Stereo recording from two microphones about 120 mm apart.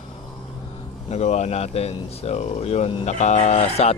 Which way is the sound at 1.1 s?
70° left (ahead or behind).